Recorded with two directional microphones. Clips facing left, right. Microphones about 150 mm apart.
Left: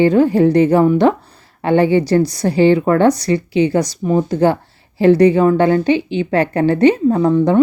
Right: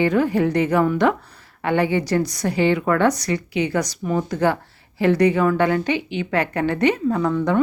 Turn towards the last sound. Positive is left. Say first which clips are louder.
# left 7 dB
turn(degrees=30)  # may be behind; listen again after turning